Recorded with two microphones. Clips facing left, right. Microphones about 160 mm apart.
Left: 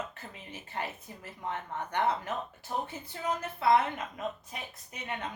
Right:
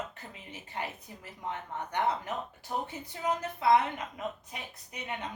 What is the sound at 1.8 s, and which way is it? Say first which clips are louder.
A woman's voice: left 1 dB; 15° right (ahead or behind).